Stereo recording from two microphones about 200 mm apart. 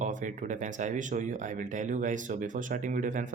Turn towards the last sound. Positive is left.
turn(degrees=-40)  # may be behind; listen again after turning